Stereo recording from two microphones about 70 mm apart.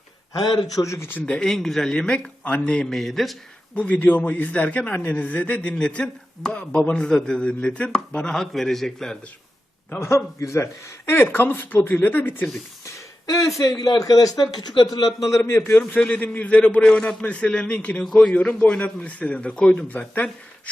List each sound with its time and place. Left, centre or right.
0.9 s speech: left
1.2 s speech: centre
2.7 s a man's voice: centre
3.8 s a man's voice: left; by 9.1 s centre
10.0 s a man's voice: left
11.2 s speech: left
12.8 s a sound: left
13.7 s a man's voice: left
15.4 s speech: left
16.0 s a man's voice: left